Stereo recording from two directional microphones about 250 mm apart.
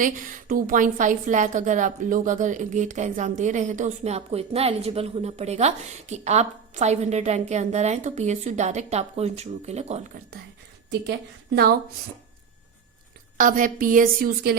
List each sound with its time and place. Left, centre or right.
0.0 s a woman's voice: right
11.5 s a woman's voice: right
13.3 s a woman's voice: right